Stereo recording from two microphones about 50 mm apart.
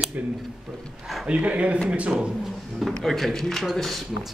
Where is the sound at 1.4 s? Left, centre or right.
Right.